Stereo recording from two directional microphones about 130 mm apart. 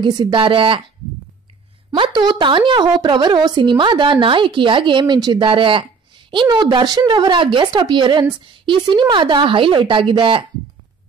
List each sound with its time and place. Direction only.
0.0 s a woman's voice: 35° right (ahead or behind)
1.9 s a woman's voice: 35° right (ahead or behind)